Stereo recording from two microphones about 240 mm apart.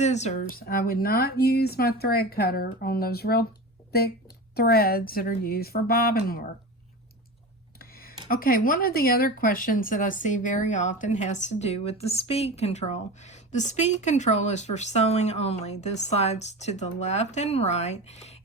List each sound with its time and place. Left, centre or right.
0.0 s speech: left
7.8 s a sound: left
8.3 s speech: left